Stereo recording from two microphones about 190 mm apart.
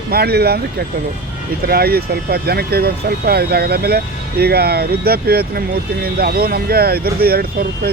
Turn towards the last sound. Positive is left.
turn(degrees=-55)  # may be behind; listen again after turning